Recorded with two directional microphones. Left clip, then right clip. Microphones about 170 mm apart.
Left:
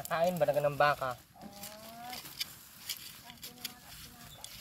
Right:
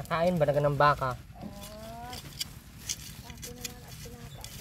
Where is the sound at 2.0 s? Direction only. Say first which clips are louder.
Left 1 dB; 10° left (ahead or behind).